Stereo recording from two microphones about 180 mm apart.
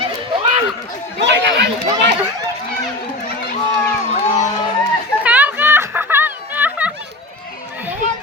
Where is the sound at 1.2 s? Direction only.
75° right (ahead or behind).